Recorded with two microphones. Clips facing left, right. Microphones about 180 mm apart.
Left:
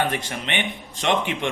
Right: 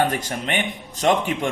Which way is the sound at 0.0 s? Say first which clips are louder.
Right 3 dB; 40° right (ahead or behind).